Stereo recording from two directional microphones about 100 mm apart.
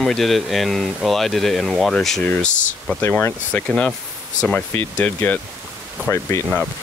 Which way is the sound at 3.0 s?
25° left (ahead or behind).